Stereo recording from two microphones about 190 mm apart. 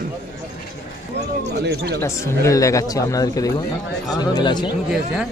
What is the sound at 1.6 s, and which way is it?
Speech, 55° right (ahead or behind).